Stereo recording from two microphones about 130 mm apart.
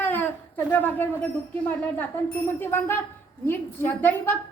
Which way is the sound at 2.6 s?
15° left (ahead or behind).